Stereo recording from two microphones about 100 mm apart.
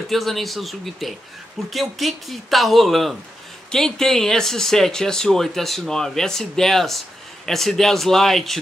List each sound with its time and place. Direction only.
0.1 s speech: centre (ahead or behind)